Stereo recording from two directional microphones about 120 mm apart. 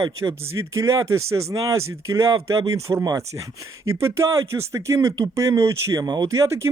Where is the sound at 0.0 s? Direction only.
25° right (ahead or behind).